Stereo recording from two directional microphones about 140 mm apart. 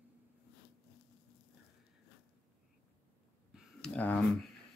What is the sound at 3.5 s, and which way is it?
Speech, 5° left (ahead or behind).